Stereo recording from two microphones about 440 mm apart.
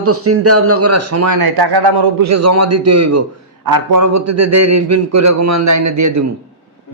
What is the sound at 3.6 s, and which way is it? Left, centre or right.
A man's voice, right.